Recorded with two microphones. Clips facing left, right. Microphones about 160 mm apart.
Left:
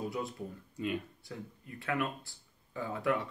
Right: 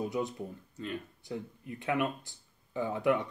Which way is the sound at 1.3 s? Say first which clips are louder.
Right 6 dB; 20° right (ahead or behind).